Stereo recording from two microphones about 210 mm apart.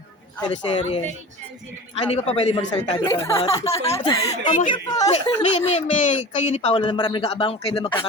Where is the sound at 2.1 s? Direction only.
30° left (ahead or behind).